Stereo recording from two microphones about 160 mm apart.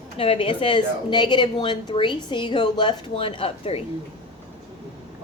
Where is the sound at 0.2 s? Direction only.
35° left (ahead or behind).